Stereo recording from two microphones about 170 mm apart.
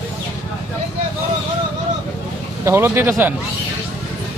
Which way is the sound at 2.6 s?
15° right (ahead or behind).